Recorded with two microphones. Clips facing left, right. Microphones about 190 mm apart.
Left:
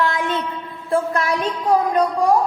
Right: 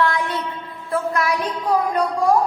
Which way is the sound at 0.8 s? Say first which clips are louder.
Left 2 dB; 30° left (ahead or behind).